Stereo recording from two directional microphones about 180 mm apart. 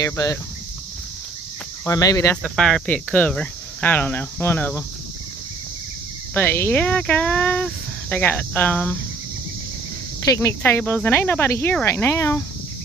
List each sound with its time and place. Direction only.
0.0 s speech: 20° left (ahead or behind)
1.9 s speech: 20° left (ahead or behind)
2.4 s speech: 5° left (ahead or behind)
6.3 s speech: 10° left (ahead or behind)
10.3 s speech: 15° left (ahead or behind)